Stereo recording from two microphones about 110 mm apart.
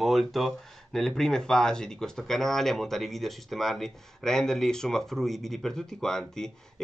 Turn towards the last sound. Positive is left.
turn(degrees=5)  # may be behind; listen again after turning